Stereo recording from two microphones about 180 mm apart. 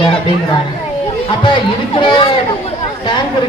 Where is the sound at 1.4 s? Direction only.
25° left (ahead or behind).